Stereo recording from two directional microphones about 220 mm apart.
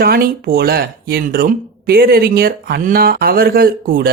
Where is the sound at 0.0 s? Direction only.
45° right (ahead or behind).